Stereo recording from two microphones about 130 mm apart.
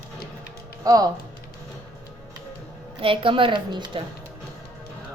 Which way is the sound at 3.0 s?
40° right (ahead or behind).